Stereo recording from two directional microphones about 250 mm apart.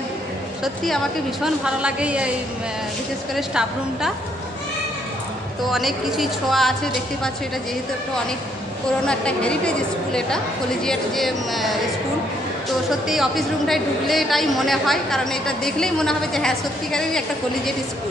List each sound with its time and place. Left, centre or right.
0.8 s a woman's voice: centre
3.3 s a woman's voice: centre
5.7 s a woman's voice: centre
9.0 s a woman's voice: centre
13.1 s a woman's voice: centre